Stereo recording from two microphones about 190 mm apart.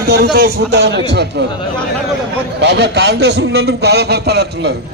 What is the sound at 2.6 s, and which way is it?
A man's voice, 65° right (ahead or behind).